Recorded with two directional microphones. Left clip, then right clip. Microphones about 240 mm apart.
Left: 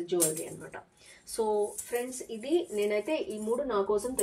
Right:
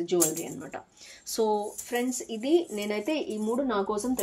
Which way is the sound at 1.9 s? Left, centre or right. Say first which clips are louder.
Right 4 dB; right.